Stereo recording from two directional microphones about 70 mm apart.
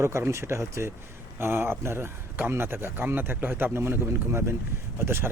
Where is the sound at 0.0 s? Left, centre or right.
Right.